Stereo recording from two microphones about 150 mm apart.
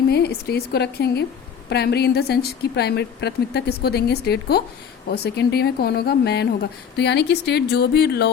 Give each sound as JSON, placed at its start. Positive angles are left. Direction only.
{"t": 0.1, "sound": "speech", "side_deg": 90}